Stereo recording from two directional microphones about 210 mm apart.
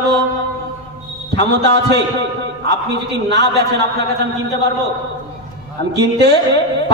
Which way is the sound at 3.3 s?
55° right (ahead or behind).